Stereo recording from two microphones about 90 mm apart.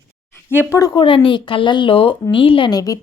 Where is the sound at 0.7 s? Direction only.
40° left (ahead or behind).